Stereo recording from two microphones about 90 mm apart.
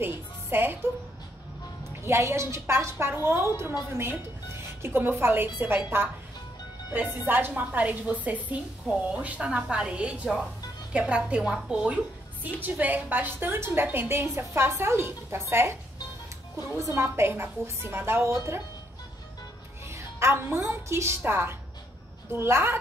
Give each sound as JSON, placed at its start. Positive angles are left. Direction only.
{"t": 0.0, "sound": "music", "side_deg": -25}
{"t": 1.9, "sound": "a woman's voice", "side_deg": -30}
{"t": 16.7, "sound": "a woman's voice", "side_deg": -30}
{"t": 19.9, "sound": "a woman's voice", "side_deg": -30}